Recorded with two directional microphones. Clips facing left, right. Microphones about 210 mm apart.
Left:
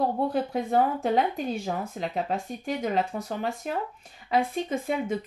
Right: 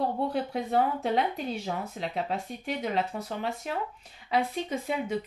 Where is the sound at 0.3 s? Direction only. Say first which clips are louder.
Left 3 dB; 45° left (ahead or behind).